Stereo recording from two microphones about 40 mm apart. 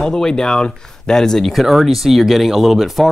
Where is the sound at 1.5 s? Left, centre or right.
Centre.